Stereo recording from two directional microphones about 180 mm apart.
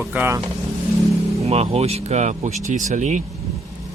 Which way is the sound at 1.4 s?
35° right (ahead or behind).